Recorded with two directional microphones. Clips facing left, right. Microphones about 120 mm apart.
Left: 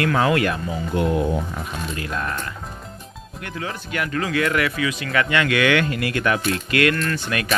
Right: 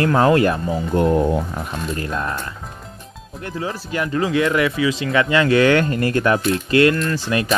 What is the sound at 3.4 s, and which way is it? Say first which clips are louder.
Speech: right 4 dB; 30° right (ahead or behind).